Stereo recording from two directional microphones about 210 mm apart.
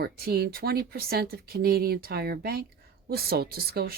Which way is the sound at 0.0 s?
50° right (ahead or behind).